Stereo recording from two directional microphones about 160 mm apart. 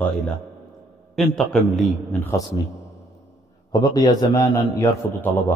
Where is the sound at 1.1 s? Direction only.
5° left (ahead or behind).